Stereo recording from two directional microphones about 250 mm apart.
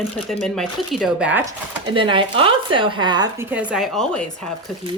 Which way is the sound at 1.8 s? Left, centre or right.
Centre.